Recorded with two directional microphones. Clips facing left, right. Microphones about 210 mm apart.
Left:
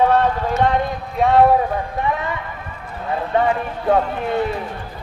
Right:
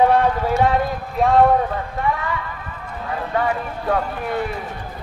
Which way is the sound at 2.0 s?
20° left (ahead or behind).